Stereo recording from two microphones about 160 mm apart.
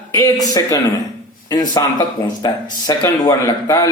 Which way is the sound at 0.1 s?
20° left (ahead or behind).